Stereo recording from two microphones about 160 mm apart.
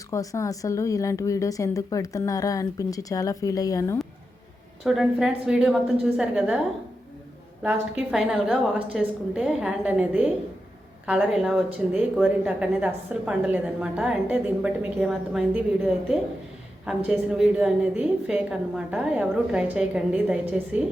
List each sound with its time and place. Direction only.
0.1 s speech: 20° left (ahead or behind)
4.8 s a woman's voice: centre (ahead or behind)
7.6 s a woman's voice: 5° right (ahead or behind)